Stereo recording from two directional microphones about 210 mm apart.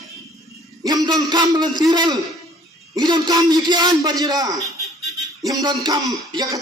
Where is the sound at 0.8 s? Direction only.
20° right (ahead or behind).